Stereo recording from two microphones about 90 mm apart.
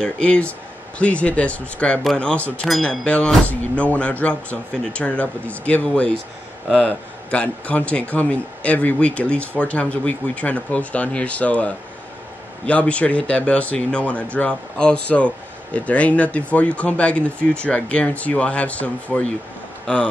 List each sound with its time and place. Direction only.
0.0 s speech: 15° left (ahead or behind)